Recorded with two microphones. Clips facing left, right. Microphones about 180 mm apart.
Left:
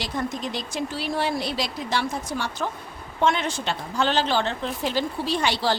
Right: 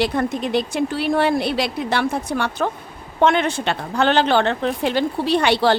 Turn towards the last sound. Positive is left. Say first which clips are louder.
# right 7 dB
turn(degrees=-65)  # may be behind; listen again after turning